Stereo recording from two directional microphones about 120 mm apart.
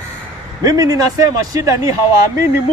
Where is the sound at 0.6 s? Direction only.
30° right (ahead or behind).